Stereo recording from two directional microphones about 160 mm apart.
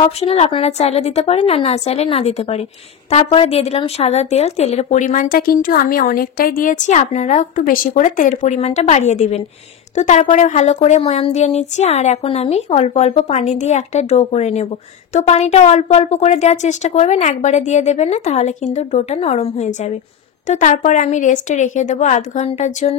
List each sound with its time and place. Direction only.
0.0 s a woman's voice: 40° left (ahead or behind)